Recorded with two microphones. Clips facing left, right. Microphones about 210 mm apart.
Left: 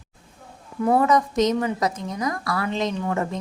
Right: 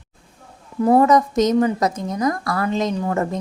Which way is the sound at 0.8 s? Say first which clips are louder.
Right 5 dB; 35° right (ahead or behind).